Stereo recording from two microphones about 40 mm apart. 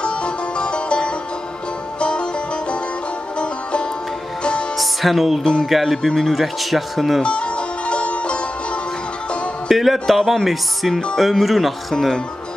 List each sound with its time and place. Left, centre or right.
0.0 s music: left
4.4 s music: left
4.7 s music: centre
5.4 s speech: left
5.7 s speech: centre
7.2 s music: left
9.7 s a man's voice: centre
11.9 s speech: centre